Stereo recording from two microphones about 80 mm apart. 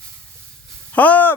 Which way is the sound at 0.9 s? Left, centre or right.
Centre.